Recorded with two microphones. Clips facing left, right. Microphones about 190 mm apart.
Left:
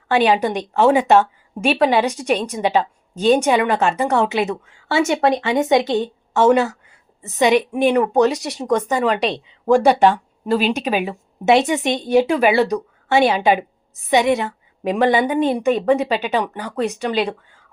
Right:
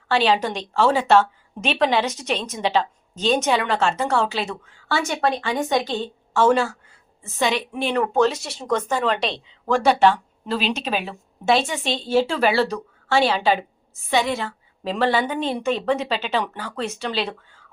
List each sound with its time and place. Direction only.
0.1 s a woman's voice: 15° left (ahead or behind)